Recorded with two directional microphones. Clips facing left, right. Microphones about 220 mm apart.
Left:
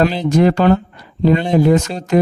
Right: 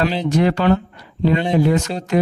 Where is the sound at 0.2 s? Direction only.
45° left (ahead or behind).